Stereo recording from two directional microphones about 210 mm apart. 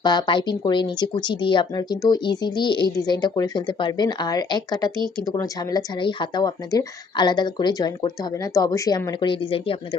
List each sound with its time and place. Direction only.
0.0 s speech: 20° left (ahead or behind)